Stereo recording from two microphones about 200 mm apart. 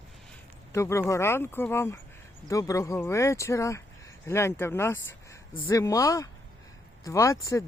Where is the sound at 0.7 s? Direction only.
15° left (ahead or behind).